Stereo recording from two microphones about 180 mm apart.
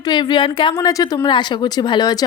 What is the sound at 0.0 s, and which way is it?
A woman's voice, 25° left (ahead or behind).